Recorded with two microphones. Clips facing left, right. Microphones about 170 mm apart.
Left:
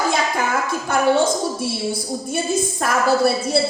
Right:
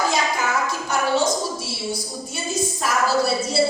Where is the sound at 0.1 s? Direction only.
55° left (ahead or behind).